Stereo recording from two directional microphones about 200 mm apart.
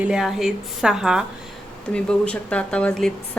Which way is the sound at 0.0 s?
5° right (ahead or behind).